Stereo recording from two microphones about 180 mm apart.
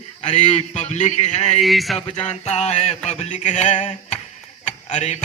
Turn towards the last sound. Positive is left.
turn(degrees=40)  # may be behind; listen again after turning